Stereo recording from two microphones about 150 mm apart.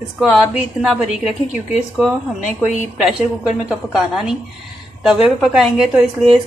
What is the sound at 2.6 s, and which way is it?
A woman's voice, 5° right (ahead or behind).